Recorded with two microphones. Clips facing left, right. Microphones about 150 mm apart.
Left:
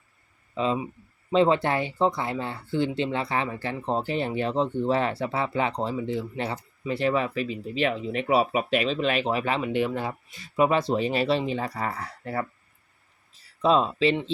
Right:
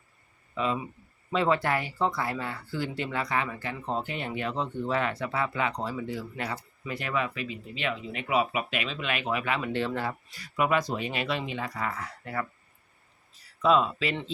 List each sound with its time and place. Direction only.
0.5 s speech: 25° left (ahead or behind)
9.7 s speech: 15° left (ahead or behind); by 12.5 s 30° left (ahead or behind)
13.6 s speech: 30° left (ahead or behind)